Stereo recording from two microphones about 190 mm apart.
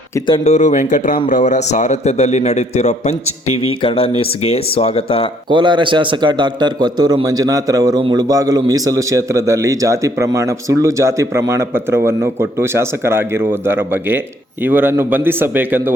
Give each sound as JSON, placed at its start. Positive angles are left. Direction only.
{"t": 0.1, "sound": "a man's voice", "side_deg": 25}
{"t": 5.5, "sound": "a man's voice", "side_deg": -25}